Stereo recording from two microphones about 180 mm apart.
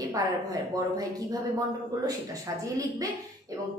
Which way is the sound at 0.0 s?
20° right (ahead or behind).